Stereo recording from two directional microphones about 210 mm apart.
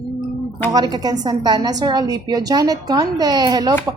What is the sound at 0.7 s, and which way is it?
A woman's voice, 20° right (ahead or behind).